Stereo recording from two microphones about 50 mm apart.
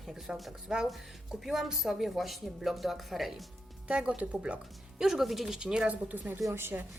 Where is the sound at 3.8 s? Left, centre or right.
Right.